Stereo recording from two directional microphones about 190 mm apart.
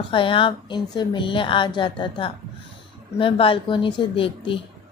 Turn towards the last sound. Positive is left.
turn(degrees=25)  # may be behind; listen again after turning